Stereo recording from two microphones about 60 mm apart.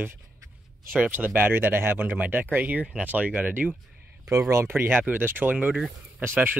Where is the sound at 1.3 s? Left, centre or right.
Right.